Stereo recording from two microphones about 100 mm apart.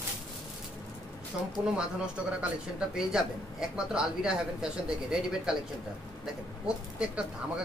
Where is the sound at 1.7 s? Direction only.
10° right (ahead or behind).